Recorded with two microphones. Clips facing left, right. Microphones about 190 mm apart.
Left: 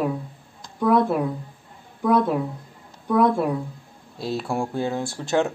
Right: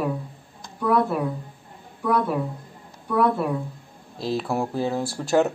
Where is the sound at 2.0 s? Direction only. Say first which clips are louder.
Left 3 dB; 15° left (ahead or behind).